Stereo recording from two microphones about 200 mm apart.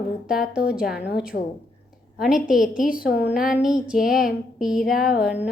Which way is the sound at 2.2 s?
5° right (ahead or behind).